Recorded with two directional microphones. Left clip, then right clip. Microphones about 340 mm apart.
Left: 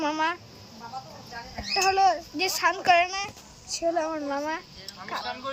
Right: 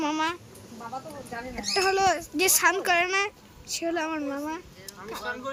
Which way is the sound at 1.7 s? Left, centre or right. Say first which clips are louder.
Left 2 dB; centre.